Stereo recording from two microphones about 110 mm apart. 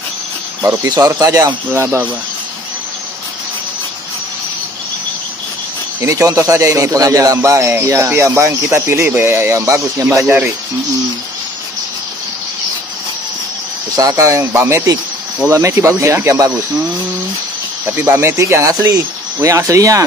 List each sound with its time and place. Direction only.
0.6 s speech: 35° right (ahead or behind)
1.7 s speech: 20° right (ahead or behind)
5.9 s speech: 30° right (ahead or behind)
13.9 s speech: 30° right (ahead or behind)
17.8 s speech: 20° right (ahead or behind)